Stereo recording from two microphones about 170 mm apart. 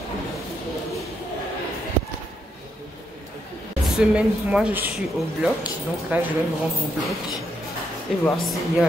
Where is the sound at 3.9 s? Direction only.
5° right (ahead or behind).